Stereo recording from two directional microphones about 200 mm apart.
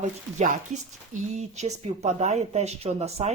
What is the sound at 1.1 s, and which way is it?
Speech, 35° right (ahead or behind).